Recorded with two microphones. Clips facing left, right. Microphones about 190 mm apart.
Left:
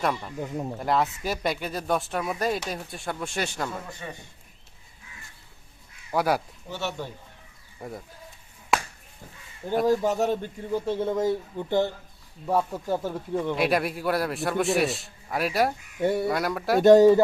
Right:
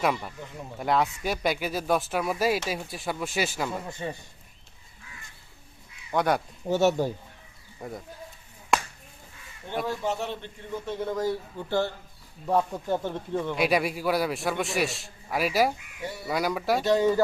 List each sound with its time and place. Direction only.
0.0 s a man's voice: 5° right (ahead or behind)
3.7 s a man's voice: 25° right (ahead or behind)
6.1 s speech: 5° left (ahead or behind)
6.7 s speech: 45° right (ahead or behind)
7.8 s speech: centre (ahead or behind)
8.7 s finger snapping: 5° left (ahead or behind)
9.8 s a man's voice: 40° left (ahead or behind); by 11.9 s 20° left (ahead or behind)
12.5 s speech: 5° left (ahead or behind)
13.6 s a man's voice: centre (ahead or behind)
16.0 s speech: 55° left (ahead or behind)
16.2 s a man's voice: centre (ahead or behind)
16.8 s speech: 45° left (ahead or behind)